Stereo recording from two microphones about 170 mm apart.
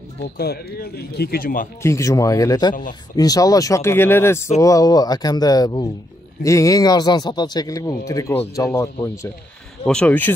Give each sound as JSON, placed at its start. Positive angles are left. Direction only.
{"t": 0.4, "sound": "speech", "side_deg": 70}
{"t": 1.8, "sound": "speech", "side_deg": 20}
{"t": 9.8, "sound": "speech", "side_deg": 5}